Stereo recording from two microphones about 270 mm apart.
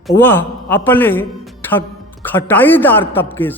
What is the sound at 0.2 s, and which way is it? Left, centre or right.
A man's voice, centre.